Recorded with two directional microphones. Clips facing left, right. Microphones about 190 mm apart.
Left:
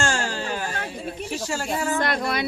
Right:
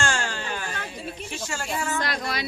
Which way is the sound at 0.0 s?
40° left (ahead or behind).